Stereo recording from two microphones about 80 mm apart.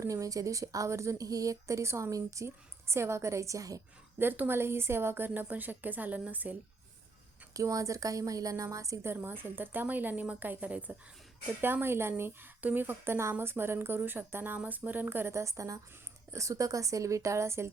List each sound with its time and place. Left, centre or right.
0.0 s a woman's voice: right
4.2 s speech: right
7.5 s a woman's voice: right
9.0 s speech: right
11.6 s a woman's voice: right